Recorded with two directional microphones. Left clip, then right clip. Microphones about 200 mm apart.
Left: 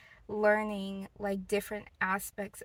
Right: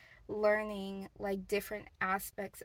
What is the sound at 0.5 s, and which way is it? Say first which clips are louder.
Speech: left 3 dB; 10° left (ahead or behind).